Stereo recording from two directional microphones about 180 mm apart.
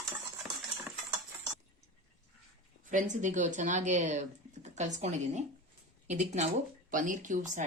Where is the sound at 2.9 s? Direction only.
40° right (ahead or behind).